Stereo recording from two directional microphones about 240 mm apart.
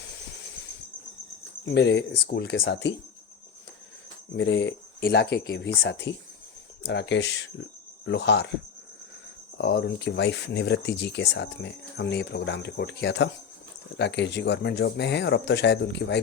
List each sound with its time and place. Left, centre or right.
1.6 s speech: left
4.4 s speech: left
9.6 s speech: left